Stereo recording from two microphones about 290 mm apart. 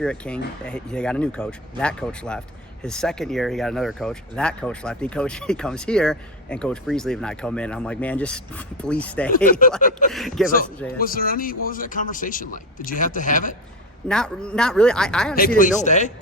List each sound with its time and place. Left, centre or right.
0.0 s speech: centre
9.3 s a man's voice: left
10.1 s speech: centre
10.9 s a man's voice: left
14.1 s speech: centre
15.5 s a man's voice: left